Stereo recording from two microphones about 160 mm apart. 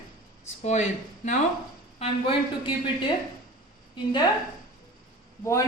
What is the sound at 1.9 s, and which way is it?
A woman's voice, 35° left (ahead or behind).